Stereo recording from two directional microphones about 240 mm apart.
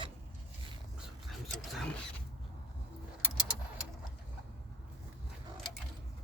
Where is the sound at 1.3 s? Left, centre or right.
Centre.